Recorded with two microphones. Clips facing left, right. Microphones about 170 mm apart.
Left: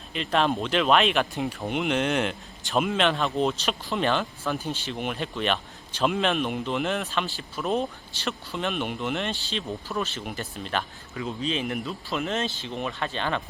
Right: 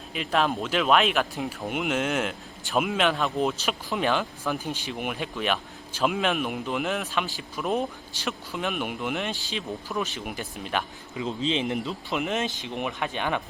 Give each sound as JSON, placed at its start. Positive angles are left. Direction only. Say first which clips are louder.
{"t": 0.1, "sound": "speech", "louder": "left 1 dB", "side_deg": -5}
{"t": 11.3, "sound": "speech", "louder": "right 2 dB", "side_deg": -20}